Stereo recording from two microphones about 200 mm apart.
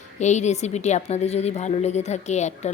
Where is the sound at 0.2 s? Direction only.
35° left (ahead or behind).